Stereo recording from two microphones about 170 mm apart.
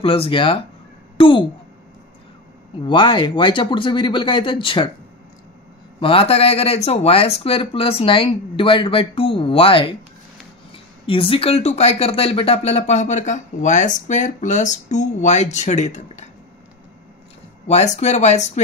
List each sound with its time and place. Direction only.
0.0 s speech: 35° left (ahead or behind)
1.1 s a sound: 30° left (ahead or behind)
2.9 s speech: 30° left (ahead or behind)
5.9 s speech: 30° left (ahead or behind)
11.1 s speech: 35° left (ahead or behind)
17.6 s speech: 40° left (ahead or behind)